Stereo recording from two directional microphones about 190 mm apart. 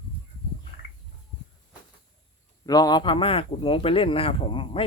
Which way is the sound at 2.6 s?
20° left (ahead or behind).